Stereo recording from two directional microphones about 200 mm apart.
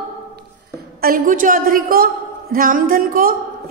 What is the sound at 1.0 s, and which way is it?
A woman's voice, 45° right (ahead or behind).